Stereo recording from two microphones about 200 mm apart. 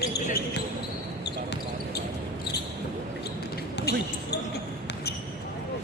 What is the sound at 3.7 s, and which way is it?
Basketball bounce, 55° left (ahead or behind).